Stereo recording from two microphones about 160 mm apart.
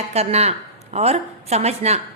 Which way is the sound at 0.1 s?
40° right (ahead or behind).